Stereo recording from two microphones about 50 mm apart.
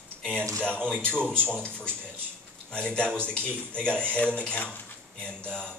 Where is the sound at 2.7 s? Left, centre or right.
Left.